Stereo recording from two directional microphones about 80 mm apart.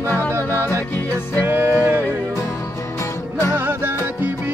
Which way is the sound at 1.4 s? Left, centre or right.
Right.